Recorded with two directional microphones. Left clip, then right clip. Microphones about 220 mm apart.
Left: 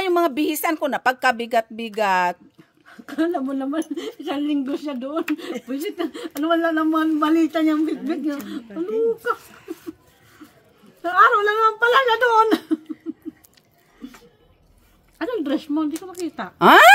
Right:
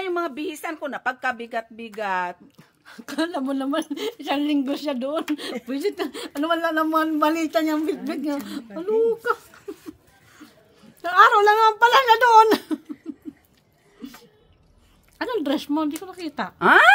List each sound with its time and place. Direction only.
0.0 s speech: 55° left (ahead or behind)
2.9 s speech: 50° right (ahead or behind)
11.0 s speech: 50° right (ahead or behind)
13.0 s a sound: 45° right (ahead or behind)
15.1 s speech: 50° right (ahead or behind)
16.5 s speech: 55° left (ahead or behind)